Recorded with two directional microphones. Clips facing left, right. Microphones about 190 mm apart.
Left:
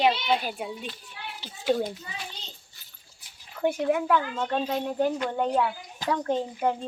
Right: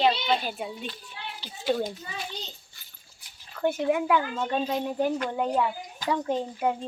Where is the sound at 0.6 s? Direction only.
5° left (ahead or behind).